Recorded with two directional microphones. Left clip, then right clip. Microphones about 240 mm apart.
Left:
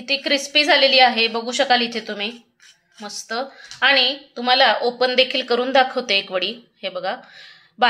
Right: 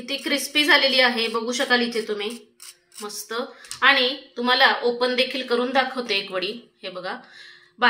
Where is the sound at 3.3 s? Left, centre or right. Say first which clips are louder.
Left 4 dB; left.